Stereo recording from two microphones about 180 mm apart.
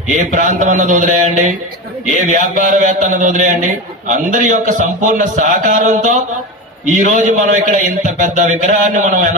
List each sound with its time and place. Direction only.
0.1 s a man's voice: 45° right (ahead or behind)